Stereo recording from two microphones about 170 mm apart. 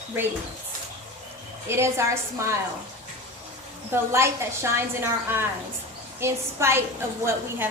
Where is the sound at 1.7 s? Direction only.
15° right (ahead or behind).